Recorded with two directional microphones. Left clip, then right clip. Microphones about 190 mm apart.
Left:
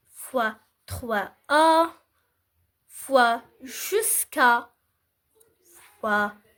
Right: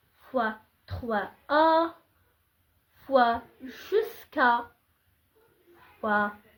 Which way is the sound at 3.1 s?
25° left (ahead or behind).